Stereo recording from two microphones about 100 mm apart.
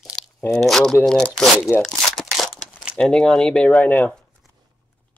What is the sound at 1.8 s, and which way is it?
Crumpling, 5° left (ahead or behind).